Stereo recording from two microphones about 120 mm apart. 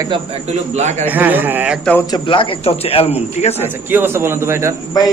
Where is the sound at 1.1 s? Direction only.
15° right (ahead or behind).